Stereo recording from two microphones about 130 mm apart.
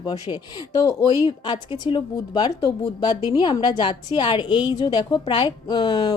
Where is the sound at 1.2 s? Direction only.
40° left (ahead or behind).